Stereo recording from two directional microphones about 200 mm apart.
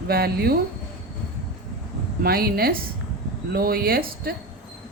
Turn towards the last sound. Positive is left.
turn(degrees=-50)  # may be behind; listen again after turning